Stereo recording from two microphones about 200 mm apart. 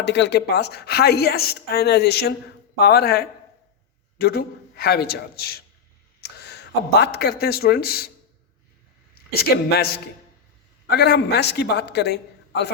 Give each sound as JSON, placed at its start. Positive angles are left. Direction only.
{"t": 0.0, "sound": "a woman's voice", "side_deg": 60}
{"t": 9.3, "sound": "a man's voice", "side_deg": 50}